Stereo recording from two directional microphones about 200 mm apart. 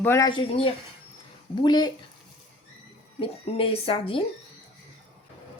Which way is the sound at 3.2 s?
30° left (ahead or behind).